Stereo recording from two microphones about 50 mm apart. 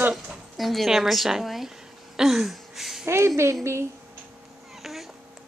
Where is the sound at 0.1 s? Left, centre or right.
Centre.